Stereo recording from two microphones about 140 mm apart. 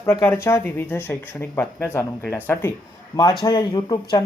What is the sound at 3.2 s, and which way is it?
Speech, 30° left (ahead or behind).